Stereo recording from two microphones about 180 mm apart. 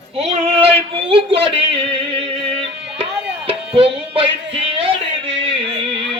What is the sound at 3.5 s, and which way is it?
Music, 30° right (ahead or behind).